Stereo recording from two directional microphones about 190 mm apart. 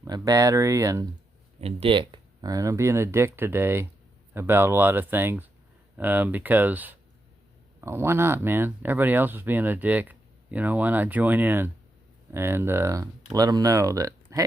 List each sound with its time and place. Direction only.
0.0 s speech: 15° right (ahead or behind)
1.6 s speech: 30° right (ahead or behind)